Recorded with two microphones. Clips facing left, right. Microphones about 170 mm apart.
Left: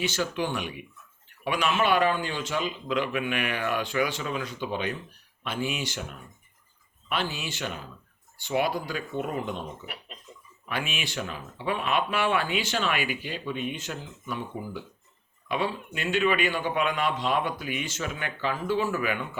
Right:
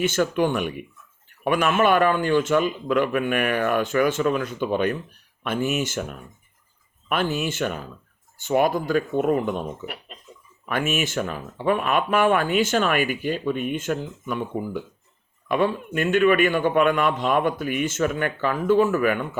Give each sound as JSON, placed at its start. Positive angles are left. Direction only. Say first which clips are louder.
{"t": 0.0, "sound": "speech", "louder": "right 7 dB", "side_deg": -50}